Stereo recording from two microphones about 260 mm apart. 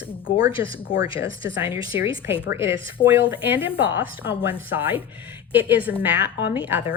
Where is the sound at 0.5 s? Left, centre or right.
Centre.